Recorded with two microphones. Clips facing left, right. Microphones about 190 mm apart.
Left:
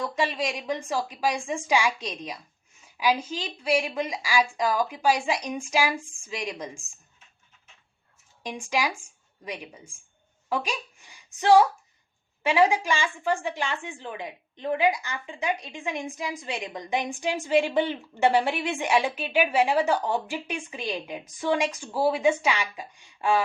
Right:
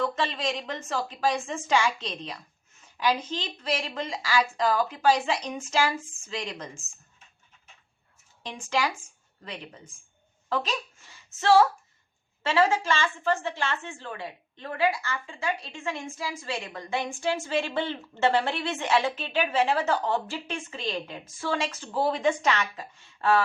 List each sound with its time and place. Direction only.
0.0 s a woman's voice: 10° left (ahead or behind)
8.7 s a woman's voice: 15° left (ahead or behind)